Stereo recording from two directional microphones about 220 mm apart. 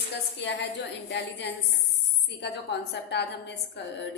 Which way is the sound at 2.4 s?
50° left (ahead or behind).